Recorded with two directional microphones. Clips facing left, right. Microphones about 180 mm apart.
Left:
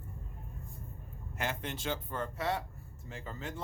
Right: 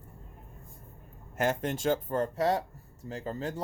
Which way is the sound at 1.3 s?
45° right (ahead or behind).